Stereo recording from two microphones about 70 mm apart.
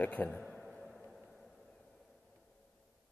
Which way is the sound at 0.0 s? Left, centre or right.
Left.